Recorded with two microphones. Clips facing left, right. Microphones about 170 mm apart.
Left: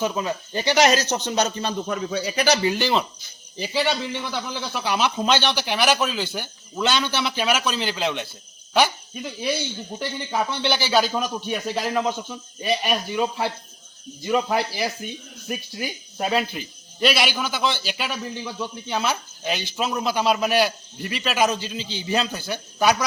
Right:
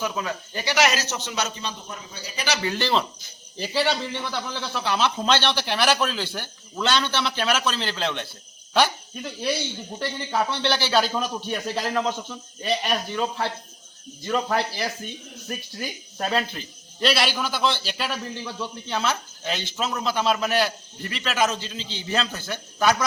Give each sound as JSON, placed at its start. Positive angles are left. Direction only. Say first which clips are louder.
{"t": 0.0, "sound": "speech", "louder": "left 4 dB", "side_deg": 25}
{"t": 1.9, "sound": "a man's voice", "louder": "left 13 dB", "side_deg": 80}
{"t": 2.7, "sound": "a man's voice", "louder": "left 1 dB", "side_deg": 5}